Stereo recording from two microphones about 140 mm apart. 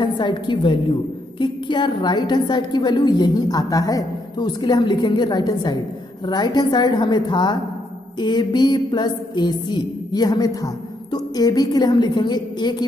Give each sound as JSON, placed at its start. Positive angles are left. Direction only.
{"t": 0.0, "sound": "a woman's voice", "side_deg": 35}